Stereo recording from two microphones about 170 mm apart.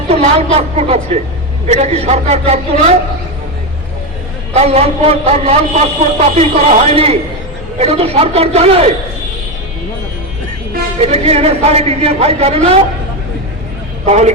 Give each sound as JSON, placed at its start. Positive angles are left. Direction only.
{"t": 0.1, "sound": "a man's voice", "side_deg": -35}
{"t": 4.5, "sound": "a man's voice", "side_deg": -40}
{"t": 11.0, "sound": "a man's voice", "side_deg": -35}
{"t": 14.0, "sound": "speech", "side_deg": -40}